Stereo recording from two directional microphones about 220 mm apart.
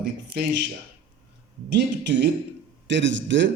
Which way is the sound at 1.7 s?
50° right (ahead or behind).